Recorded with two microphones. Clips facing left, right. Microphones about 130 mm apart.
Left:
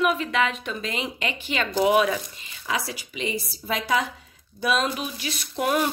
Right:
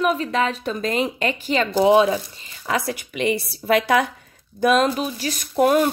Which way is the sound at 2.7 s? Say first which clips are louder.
Right 5 dB; 50° right (ahead or behind).